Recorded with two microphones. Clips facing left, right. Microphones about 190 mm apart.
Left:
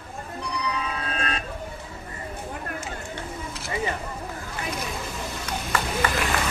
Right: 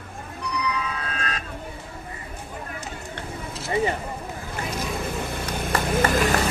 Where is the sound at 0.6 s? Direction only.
30° left (ahead or behind).